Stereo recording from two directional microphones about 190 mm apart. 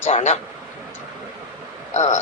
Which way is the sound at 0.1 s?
35° left (ahead or behind).